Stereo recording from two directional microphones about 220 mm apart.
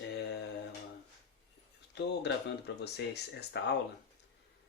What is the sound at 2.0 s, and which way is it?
Speech, 50° left (ahead or behind).